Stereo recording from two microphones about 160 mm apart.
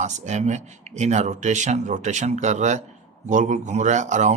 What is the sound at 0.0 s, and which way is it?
Speech, 45° right (ahead or behind).